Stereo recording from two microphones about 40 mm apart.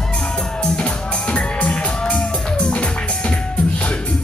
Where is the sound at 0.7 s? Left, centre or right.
Left.